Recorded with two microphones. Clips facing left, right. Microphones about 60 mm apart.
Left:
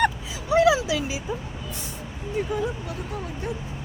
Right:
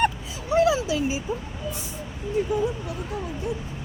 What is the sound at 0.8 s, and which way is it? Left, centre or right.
Speech, left.